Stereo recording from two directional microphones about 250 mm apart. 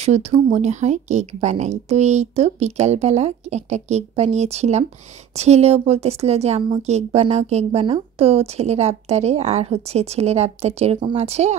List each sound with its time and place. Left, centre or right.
0.0 s a woman's voice: right